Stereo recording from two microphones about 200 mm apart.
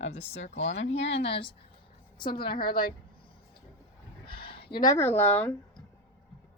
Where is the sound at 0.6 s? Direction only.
70° left (ahead or behind).